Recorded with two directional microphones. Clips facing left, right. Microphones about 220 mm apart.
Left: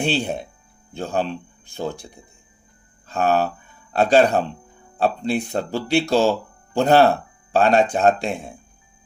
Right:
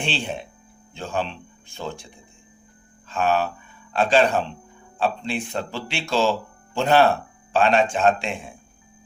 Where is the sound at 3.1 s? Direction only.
40° left (ahead or behind).